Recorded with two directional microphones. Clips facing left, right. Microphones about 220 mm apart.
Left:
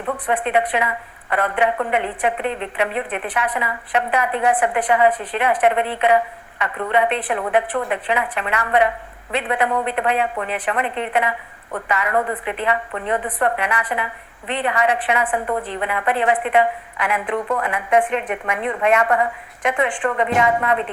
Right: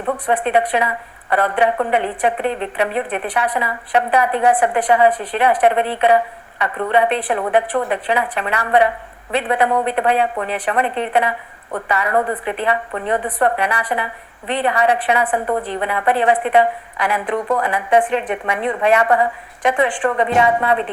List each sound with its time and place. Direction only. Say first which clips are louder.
0.0 s a woman's voice: right 3 dB; 35° right (ahead or behind)